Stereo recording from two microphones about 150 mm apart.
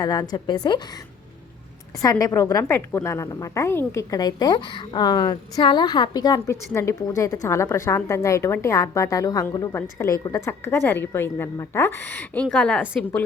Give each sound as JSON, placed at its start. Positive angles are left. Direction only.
{"t": 0.0, "sound": "a woman's voice", "side_deg": 25}
{"t": 2.0, "sound": "a woman's voice", "side_deg": 25}